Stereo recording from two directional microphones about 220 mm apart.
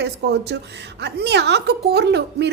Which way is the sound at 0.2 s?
50° right (ahead or behind).